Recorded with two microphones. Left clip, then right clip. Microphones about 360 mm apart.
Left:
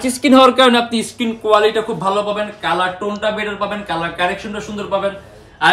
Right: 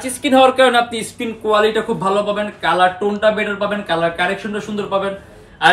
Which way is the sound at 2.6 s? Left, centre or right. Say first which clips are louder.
Right 5 dB; centre.